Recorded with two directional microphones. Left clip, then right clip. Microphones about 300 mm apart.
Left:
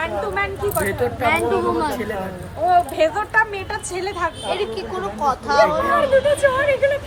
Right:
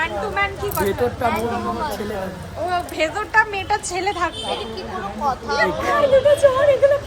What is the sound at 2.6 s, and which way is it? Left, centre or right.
A woman's voice, centre.